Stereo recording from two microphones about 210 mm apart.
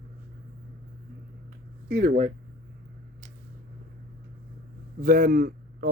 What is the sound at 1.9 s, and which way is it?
Speech, 35° right (ahead or behind).